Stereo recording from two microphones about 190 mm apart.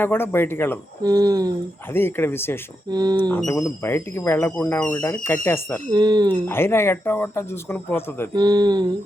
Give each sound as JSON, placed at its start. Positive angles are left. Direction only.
{"t": 0.0, "sound": "speech", "side_deg": 10}
{"t": 1.0, "sound": "speech", "side_deg": -20}
{"t": 1.9, "sound": "speech", "side_deg": 10}
{"t": 2.9, "sound": "speech", "side_deg": -20}
{"t": 3.2, "sound": "speech", "side_deg": 10}
{"t": 5.9, "sound": "speech", "side_deg": -20}
{"t": 6.5, "sound": "speech", "side_deg": 15}
{"t": 8.3, "sound": "speech", "side_deg": -20}